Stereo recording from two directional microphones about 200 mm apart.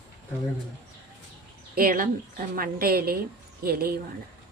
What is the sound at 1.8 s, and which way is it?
A woman's voice, 45° right (ahead or behind).